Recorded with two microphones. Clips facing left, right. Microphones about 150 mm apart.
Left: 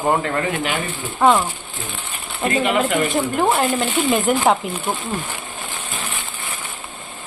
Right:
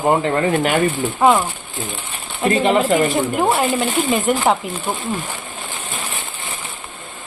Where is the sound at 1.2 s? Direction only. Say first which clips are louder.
Right 1 dB; 5° right (ahead or behind).